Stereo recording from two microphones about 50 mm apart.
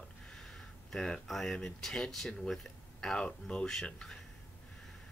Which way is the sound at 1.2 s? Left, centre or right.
Centre.